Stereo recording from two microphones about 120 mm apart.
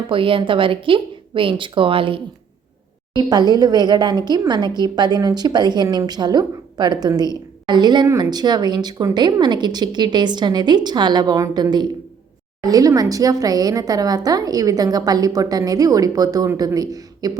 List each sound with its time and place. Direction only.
0.1 s speech: 45° right (ahead or behind)
3.2 s speech: 35° right (ahead or behind)